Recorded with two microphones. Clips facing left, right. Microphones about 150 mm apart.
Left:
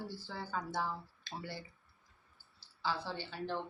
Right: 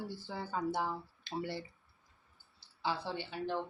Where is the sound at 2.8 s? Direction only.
25° right (ahead or behind).